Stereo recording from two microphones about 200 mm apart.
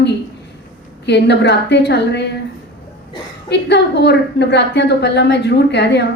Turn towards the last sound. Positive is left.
turn(degrees=60)  # may be behind; listen again after turning